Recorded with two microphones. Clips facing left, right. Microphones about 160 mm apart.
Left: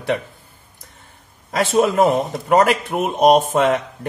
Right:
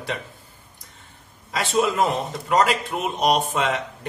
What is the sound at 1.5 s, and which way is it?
A man's voice, 50° left (ahead or behind).